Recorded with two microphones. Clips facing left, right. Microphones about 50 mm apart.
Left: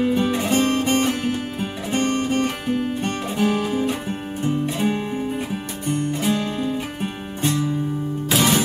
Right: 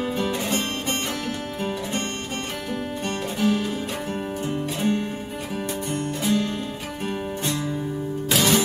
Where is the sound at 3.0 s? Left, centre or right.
Left.